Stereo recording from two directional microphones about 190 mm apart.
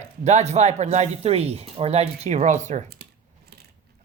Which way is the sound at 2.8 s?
55° right (ahead or behind).